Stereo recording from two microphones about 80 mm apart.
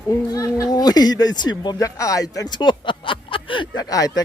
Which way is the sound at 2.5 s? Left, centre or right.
Left.